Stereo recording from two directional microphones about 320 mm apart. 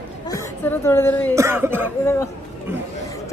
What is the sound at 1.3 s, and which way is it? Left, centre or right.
Cough, centre.